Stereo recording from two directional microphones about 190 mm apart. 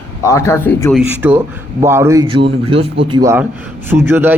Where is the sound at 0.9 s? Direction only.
10° right (ahead or behind).